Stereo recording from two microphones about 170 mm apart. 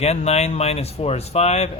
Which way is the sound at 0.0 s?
40° left (ahead or behind).